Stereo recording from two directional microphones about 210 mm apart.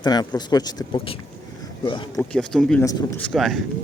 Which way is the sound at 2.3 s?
5° left (ahead or behind).